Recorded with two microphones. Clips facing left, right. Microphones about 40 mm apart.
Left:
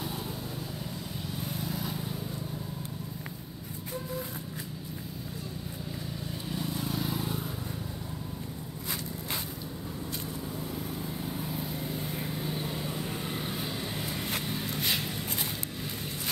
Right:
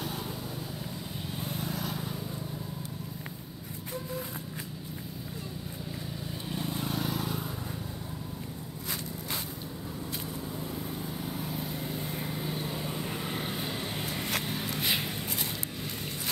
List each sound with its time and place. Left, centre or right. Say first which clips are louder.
6.7 s vehicle: right 1 dB; right
11.0 s vehicle: even; centre
14.4 s a sound: even; centre